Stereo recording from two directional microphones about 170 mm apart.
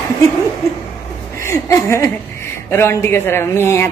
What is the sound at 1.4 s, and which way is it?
Speech, 15° left (ahead or behind).